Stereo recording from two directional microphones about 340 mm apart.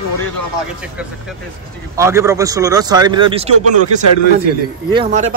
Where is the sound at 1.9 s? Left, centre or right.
Centre.